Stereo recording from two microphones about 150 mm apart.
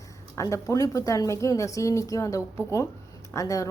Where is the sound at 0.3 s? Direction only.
20° left (ahead or behind).